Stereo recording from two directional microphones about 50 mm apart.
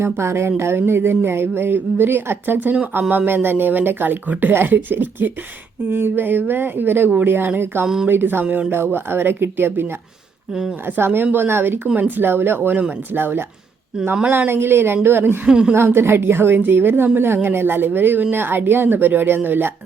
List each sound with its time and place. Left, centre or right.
0.0 s a woman's voice: right
10.5 s a woman's voice: centre
10.8 s a woman's voice: right
11.9 s speech: right
12.2 s a woman's voice: right
15.4 s a woman's voice: centre
15.7 s a woman's voice: right